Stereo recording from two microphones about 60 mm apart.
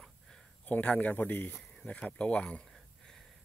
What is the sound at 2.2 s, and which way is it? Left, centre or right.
Speech, centre.